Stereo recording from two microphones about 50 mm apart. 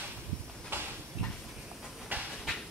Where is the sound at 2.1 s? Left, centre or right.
Right.